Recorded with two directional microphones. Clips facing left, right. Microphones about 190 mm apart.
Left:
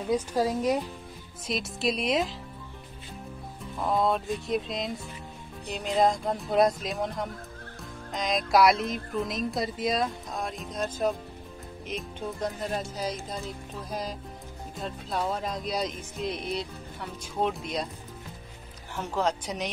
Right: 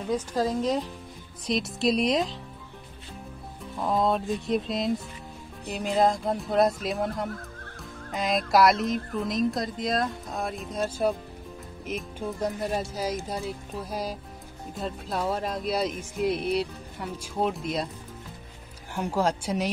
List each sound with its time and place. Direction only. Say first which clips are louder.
0.1 s speech: even; 10° left (ahead or behind)
3.8 s speech: right 1 dB; centre (ahead or behind)
11.8 s music: right 2 dB; 5° right (ahead or behind)
14.8 s speech: right 1 dB; 5° right (ahead or behind)
18.9 s music: right 2 dB; 10° right (ahead or behind)